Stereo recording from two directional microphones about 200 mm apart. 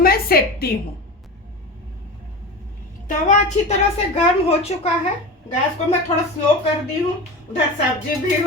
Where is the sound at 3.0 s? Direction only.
40° left (ahead or behind).